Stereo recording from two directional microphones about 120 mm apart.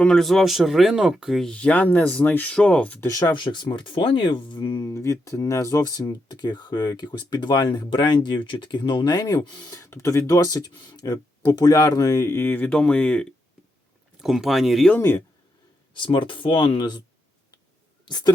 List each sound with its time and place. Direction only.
0.0 s speech: 5° left (ahead or behind)
3.1 s speech: 30° left (ahead or behind); by 13.2 s 10° left (ahead or behind)
14.2 s speech: centre (ahead or behind)
14.8 s speech: 20° left (ahead or behind)
16.0 s speech: 45° left (ahead or behind)
18.0 s a sound: 35° left (ahead or behind)